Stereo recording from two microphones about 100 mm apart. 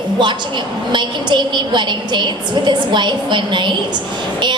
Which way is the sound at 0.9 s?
50° right (ahead or behind).